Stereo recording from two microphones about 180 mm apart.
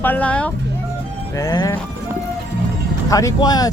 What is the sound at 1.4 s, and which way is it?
Speech, 20° left (ahead or behind).